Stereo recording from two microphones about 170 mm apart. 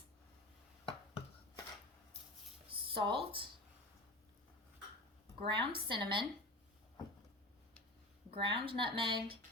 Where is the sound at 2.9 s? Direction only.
30° right (ahead or behind).